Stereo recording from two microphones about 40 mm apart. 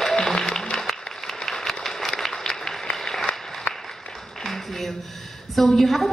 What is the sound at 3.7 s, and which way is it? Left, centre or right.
Applause, left.